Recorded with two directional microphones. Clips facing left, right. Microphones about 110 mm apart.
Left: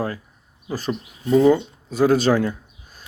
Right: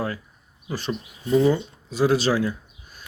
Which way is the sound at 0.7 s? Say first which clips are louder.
Left 3 dB; 45° left (ahead or behind).